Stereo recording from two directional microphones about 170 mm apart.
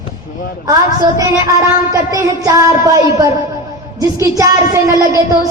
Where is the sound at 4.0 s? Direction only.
20° right (ahead or behind).